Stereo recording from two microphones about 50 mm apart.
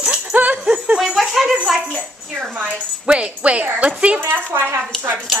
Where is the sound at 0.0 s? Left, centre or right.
Right.